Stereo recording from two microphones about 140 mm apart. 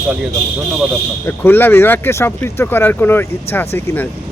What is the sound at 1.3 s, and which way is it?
Speech, 15° left (ahead or behind).